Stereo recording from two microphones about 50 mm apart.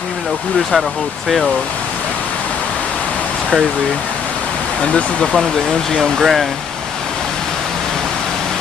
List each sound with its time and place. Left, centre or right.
4.8 s speech: centre
5.9 s speech: centre